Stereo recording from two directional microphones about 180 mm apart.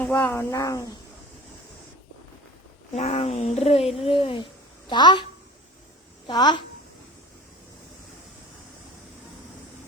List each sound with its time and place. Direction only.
0.0 s speech: 10° left (ahead or behind)
2.9 s a child's voice: 40° left (ahead or behind)